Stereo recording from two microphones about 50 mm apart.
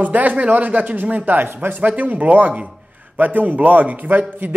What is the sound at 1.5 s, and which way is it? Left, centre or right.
Speech, right.